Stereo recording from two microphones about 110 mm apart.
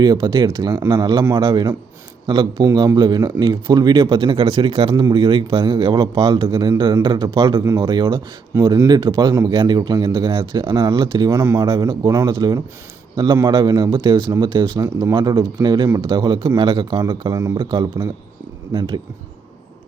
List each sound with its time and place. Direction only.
0.0 s speech: 40° right (ahead or behind)